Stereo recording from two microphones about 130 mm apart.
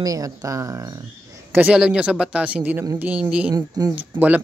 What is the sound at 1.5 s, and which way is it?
Speech, 10° right (ahead or behind).